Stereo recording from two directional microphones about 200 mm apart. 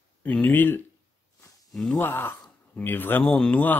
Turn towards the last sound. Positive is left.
turn(degrees=5)  # may be behind; listen again after turning